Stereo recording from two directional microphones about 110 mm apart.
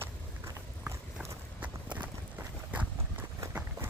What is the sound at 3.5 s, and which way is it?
Run, 20° right (ahead or behind).